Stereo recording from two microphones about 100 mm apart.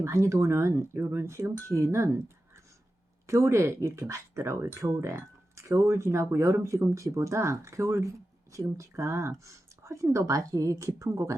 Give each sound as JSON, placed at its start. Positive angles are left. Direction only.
{"t": 0.0, "sound": "speech", "side_deg": -30}